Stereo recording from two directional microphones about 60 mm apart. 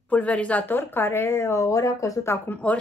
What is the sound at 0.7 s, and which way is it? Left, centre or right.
Speech, left.